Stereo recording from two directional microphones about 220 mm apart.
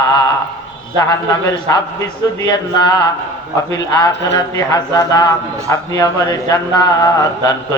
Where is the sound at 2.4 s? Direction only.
20° left (ahead or behind).